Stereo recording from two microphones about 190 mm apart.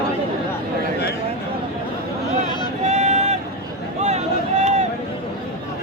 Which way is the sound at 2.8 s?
35° right (ahead or behind).